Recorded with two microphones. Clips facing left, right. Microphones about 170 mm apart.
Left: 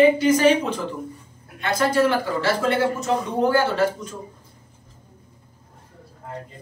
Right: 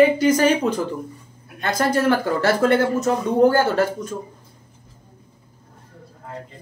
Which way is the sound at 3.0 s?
45° right (ahead or behind).